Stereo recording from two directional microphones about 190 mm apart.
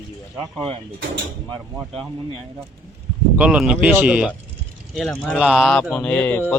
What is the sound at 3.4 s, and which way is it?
Speech, 5° right (ahead or behind).